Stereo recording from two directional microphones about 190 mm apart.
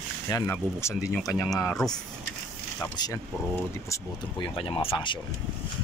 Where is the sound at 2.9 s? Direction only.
20° left (ahead or behind).